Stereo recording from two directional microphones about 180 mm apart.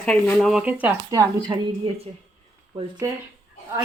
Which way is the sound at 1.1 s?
20° right (ahead or behind).